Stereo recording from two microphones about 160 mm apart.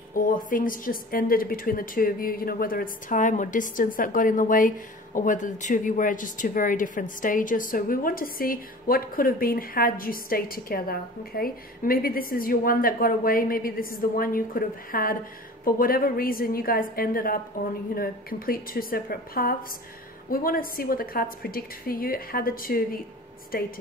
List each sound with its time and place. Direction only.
0.1 s a woman's voice: 60° left (ahead or behind)